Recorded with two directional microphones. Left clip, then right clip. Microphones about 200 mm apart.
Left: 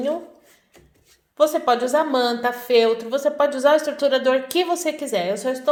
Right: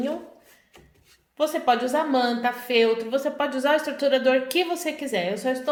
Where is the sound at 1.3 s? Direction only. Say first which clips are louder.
Left 4 dB; 30° left (ahead or behind).